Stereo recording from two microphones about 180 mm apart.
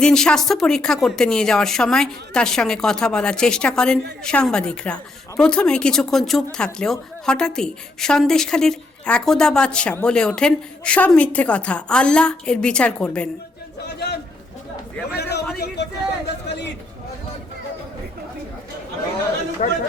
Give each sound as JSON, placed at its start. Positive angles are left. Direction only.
{"t": 0.0, "sound": "speech", "side_deg": 5}
{"t": 13.8, "sound": "a man's voice", "side_deg": 65}
{"t": 19.6, "sound": "speech", "side_deg": 40}